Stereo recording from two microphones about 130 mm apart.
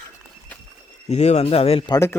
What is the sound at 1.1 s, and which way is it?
Speech, 55° left (ahead or behind).